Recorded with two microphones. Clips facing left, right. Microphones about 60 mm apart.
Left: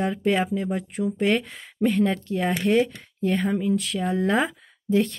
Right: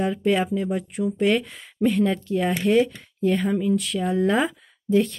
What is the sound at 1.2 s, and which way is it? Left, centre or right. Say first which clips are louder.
Speech: right 2 dB; left.